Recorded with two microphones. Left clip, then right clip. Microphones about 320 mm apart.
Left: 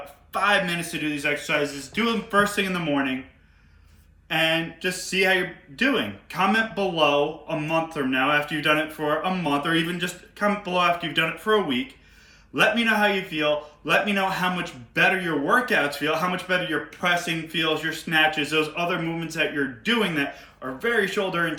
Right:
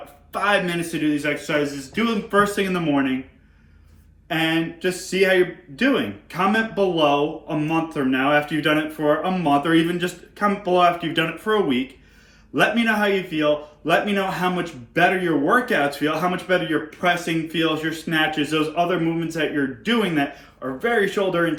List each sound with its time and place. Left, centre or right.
0.3 s speech: centre
4.3 s speech: centre